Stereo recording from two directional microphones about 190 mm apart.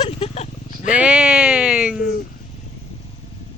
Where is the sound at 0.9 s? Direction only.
5° right (ahead or behind).